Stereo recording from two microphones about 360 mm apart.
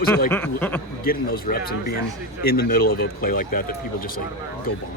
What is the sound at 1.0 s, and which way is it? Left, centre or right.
Speech, left.